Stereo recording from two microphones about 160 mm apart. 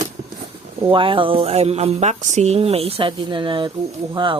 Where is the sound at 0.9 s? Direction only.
30° right (ahead or behind).